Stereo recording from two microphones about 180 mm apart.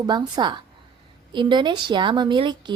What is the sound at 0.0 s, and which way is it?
A woman's voice, 25° right (ahead or behind).